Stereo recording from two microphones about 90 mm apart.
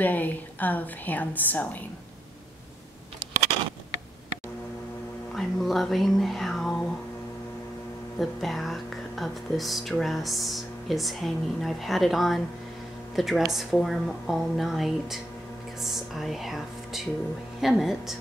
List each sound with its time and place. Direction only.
0.0 s a woman's voice: 20° left (ahead or behind)
5.3 s speech: 5° left (ahead or behind)
8.2 s speech: centre (ahead or behind)